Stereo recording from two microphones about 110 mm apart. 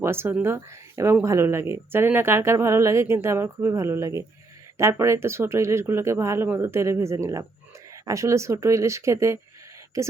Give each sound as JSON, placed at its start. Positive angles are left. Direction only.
{"t": 0.0, "sound": "a woman's voice", "side_deg": -20}